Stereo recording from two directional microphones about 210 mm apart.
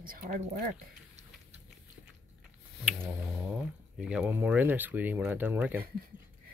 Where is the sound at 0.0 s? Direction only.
40° right (ahead or behind).